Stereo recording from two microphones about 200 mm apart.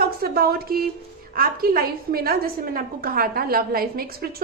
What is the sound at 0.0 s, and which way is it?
A woman's voice, 50° right (ahead or behind).